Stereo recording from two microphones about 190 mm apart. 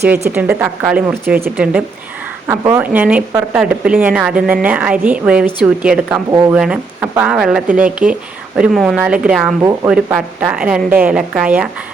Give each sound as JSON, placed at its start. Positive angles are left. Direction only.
{"t": 0.3, "sound": "speech", "side_deg": -10}
{"t": 9.6, "sound": "speech", "side_deg": -15}
{"t": 9.9, "sound": "speech", "side_deg": -5}